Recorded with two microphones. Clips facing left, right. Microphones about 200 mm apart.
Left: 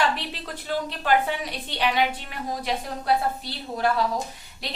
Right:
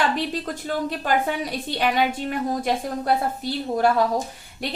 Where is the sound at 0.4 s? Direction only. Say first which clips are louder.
Right 3 dB; 45° right (ahead or behind).